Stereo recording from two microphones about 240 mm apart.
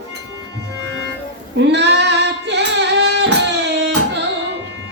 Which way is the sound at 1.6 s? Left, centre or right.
Right.